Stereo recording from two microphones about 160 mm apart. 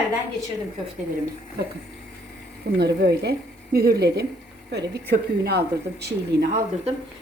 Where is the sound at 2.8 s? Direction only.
90° right.